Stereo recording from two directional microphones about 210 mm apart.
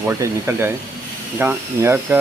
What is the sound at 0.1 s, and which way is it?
Speech, 15° right (ahead or behind).